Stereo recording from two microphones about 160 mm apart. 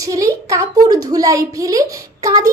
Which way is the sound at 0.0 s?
20° right (ahead or behind).